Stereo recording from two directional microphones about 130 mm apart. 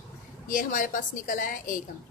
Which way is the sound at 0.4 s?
90° left.